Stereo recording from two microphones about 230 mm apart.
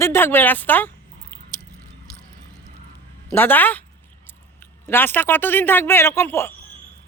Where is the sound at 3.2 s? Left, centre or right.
Centre.